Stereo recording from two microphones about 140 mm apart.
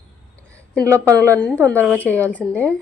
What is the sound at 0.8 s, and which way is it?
Speech, 25° right (ahead or behind).